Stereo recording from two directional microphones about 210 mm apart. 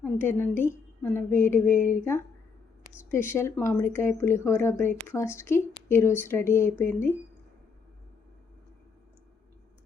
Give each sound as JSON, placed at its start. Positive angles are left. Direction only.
{"t": 0.0, "sound": "a woman's voice", "side_deg": 10}
{"t": 3.1, "sound": "speech", "side_deg": 10}